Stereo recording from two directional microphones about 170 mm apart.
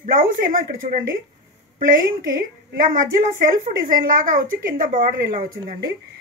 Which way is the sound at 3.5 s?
55° right (ahead or behind).